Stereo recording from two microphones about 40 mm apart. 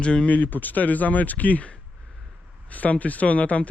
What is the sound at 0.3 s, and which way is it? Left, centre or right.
Speech, left.